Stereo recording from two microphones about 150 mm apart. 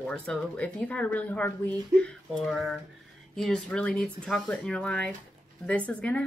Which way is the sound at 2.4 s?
5° left (ahead or behind).